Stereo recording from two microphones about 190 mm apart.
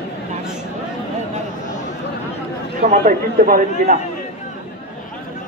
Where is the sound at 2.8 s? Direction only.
40° right (ahead or behind).